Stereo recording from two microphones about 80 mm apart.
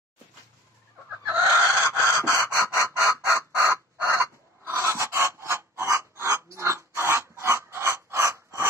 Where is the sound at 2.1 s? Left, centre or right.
Left.